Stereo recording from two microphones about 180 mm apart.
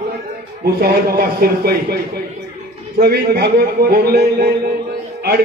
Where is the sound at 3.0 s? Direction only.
65° right (ahead or behind).